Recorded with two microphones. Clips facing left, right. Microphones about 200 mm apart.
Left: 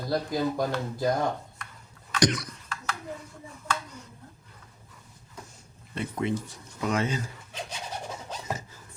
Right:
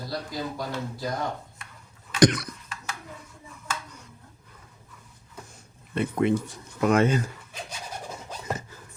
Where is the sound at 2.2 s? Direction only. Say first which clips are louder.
Right 5 dB; 55° right (ahead or behind).